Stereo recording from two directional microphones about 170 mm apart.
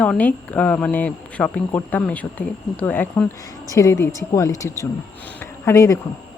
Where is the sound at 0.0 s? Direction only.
10° left (ahead or behind).